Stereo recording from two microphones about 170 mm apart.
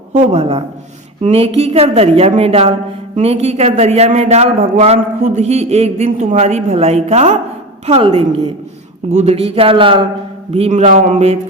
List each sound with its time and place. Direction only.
0.2 s a man's voice: 35° right (ahead or behind)